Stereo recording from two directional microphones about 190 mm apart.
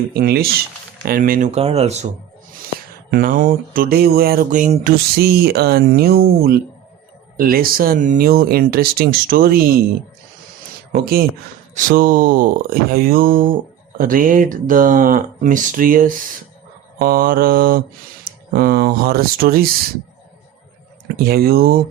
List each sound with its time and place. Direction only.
0.1 s speech: 55° right (ahead or behind); by 2.0 s 35° right (ahead or behind)
3.1 s speech: 50° right (ahead or behind)
10.9 s speech: 50° right (ahead or behind)
21.2 s speech: 55° right (ahead or behind)